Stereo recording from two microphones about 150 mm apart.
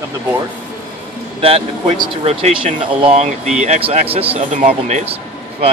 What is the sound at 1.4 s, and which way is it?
Speech, 40° right (ahead or behind).